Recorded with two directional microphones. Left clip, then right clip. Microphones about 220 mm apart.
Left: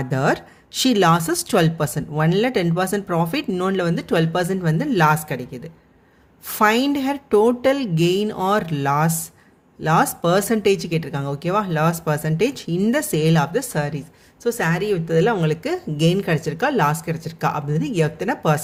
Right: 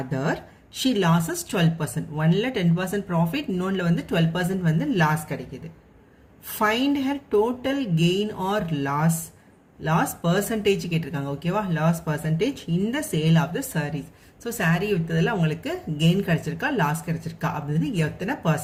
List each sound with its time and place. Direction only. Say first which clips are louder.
0.1 s speech: left 9 dB; 45° left (ahead or behind)
6.6 s speech: left 5 dB; 45° left (ahead or behind)